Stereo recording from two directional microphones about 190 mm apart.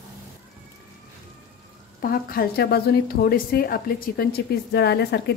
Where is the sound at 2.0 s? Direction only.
50° left (ahead or behind).